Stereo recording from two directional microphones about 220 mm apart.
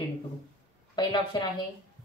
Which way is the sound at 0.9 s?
20° left (ahead or behind).